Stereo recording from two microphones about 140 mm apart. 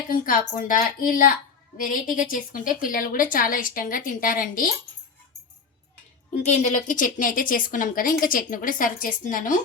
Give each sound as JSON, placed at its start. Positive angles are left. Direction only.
{"t": 0.1, "sound": "a woman's voice", "side_deg": 80}
{"t": 1.8, "sound": "a woman's voice", "side_deg": 80}
{"t": 6.3, "sound": "a woman's voice", "side_deg": 55}